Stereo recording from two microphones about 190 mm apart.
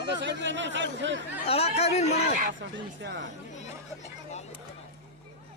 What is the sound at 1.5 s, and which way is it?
Speech, 30° left (ahead or behind).